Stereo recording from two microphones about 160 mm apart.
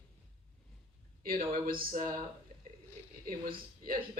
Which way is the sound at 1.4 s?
40° right (ahead or behind).